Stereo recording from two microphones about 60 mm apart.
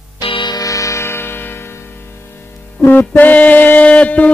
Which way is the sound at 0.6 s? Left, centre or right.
Left.